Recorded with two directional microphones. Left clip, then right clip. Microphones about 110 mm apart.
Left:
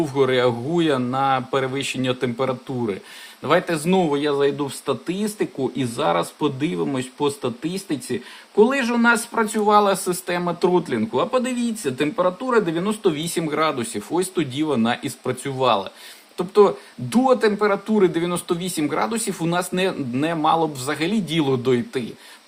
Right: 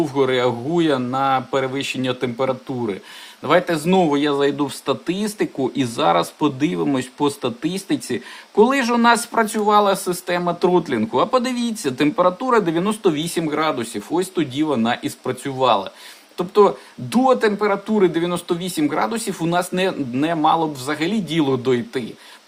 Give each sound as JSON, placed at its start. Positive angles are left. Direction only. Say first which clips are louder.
{"t": 0.0, "sound": "speech", "louder": "even", "side_deg": -5}